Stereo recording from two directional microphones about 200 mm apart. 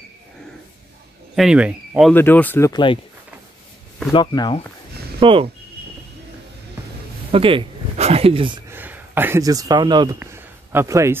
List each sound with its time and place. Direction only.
1.3 s speech: 5° right (ahead or behind)
2.1 s speech: 10° left (ahead or behind)
4.1 s speech: 20° left (ahead or behind)
5.2 s speech: 25° right (ahead or behind)
7.2 s speech: 25° right (ahead or behind)
8.6 s speech: 10° right (ahead or behind)
10.1 s speech: 10° right (ahead or behind)